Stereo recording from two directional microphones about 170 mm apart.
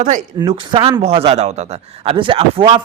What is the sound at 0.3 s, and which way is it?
Speech, 30° right (ahead or behind).